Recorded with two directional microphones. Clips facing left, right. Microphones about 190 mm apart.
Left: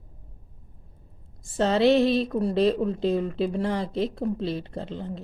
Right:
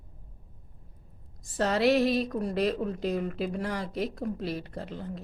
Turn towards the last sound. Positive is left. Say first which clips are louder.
# left 4 dB
turn(degrees=25)  # may be behind; listen again after turning